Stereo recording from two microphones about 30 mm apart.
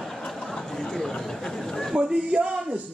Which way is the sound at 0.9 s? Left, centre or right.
Centre.